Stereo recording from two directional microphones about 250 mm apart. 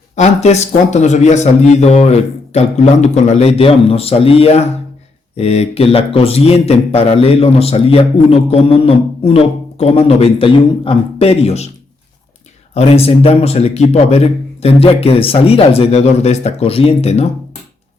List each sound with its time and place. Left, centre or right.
0.2 s a man's voice: left
12.7 s a man's voice: left